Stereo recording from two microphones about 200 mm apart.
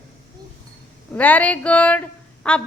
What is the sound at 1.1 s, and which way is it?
A woman's voice, 5° left (ahead or behind).